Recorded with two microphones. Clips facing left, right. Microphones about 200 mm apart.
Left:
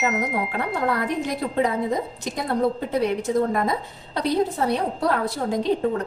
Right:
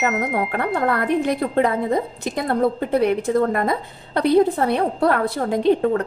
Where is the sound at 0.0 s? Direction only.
60° right (ahead or behind).